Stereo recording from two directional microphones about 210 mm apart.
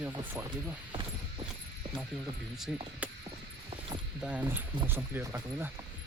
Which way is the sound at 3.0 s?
5° right (ahead or behind).